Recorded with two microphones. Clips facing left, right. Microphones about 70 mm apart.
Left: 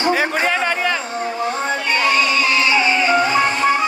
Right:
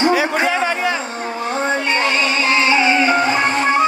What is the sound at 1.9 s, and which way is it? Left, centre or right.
Music, right.